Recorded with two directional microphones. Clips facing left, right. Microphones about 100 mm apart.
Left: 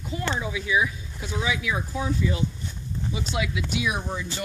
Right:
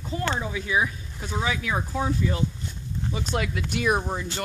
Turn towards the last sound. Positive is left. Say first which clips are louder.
# right 3 dB
turn(degrees=-50)  # may be behind; listen again after turning